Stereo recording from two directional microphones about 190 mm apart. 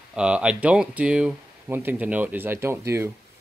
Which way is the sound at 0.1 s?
5° right (ahead or behind).